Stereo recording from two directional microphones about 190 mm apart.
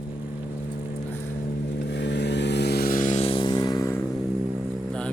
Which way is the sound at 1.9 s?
65° left (ahead or behind).